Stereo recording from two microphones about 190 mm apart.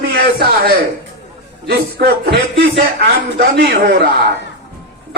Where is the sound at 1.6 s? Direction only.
55° right (ahead or behind).